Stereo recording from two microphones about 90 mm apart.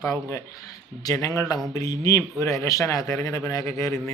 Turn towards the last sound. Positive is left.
turn(degrees=35)  # may be behind; listen again after turning